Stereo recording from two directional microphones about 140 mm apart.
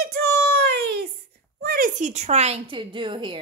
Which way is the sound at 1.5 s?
90° right.